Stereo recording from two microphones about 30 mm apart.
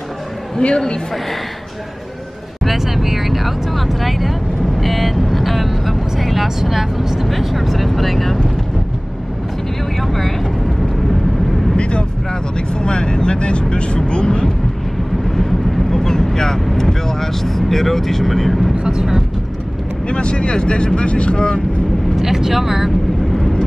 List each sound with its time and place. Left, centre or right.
0.6 s speech: left
2.8 s speech: centre
4.7 s vehicle: centre
6.6 s speech: centre
9.9 s vehicle: centre
11.7 s vehicle: left
12.5 s speech: left
15.9 s speech: centre
20.1 s speech: left
22.2 s speech: centre